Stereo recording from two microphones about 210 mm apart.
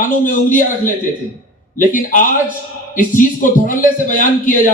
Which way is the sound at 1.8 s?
40° left (ahead or behind).